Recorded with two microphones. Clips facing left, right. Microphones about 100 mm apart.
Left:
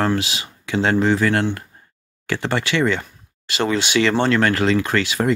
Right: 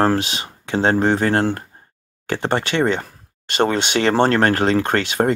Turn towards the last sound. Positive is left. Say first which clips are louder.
# right 2 dB
turn(degrees=-45)  # may be behind; listen again after turning